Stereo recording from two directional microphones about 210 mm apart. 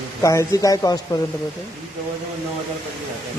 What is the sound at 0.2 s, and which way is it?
Speech, 15° left (ahead or behind).